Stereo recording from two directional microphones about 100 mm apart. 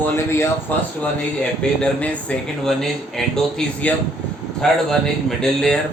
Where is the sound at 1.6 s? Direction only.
15° left (ahead or behind).